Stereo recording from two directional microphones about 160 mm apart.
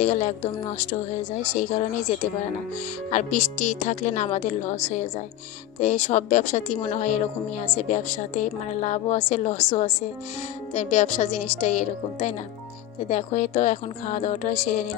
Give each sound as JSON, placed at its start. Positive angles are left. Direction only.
{"t": 0.0, "sound": "speech", "side_deg": 50}